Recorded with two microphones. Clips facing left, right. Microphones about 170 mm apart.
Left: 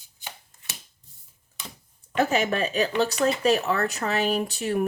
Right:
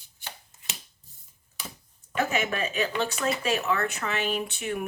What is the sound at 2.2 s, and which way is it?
Speech, 35° left (ahead or behind).